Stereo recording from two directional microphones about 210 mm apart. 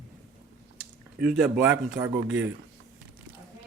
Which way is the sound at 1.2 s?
5° right (ahead or behind).